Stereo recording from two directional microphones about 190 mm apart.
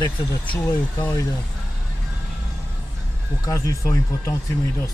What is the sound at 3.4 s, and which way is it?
Speech, 15° left (ahead or behind).